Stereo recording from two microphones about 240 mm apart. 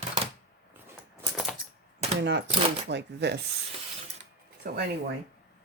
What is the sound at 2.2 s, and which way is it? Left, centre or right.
Speech, right.